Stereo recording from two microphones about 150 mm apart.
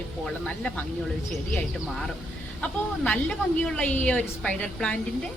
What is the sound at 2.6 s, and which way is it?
A woman's voice, 10° left (ahead or behind).